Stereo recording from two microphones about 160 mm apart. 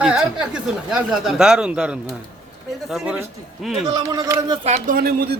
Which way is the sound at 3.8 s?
20° right (ahead or behind).